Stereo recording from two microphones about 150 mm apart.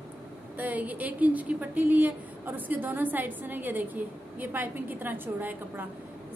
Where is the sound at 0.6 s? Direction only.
10° right (ahead or behind).